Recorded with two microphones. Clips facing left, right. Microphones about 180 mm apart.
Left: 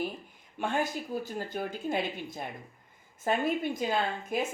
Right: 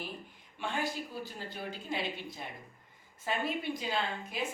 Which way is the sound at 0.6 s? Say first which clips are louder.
Left 5 dB; 45° left (ahead or behind).